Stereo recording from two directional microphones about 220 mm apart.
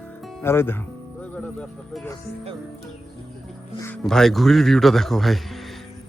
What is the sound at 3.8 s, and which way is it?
A man's voice, 5° left (ahead or behind).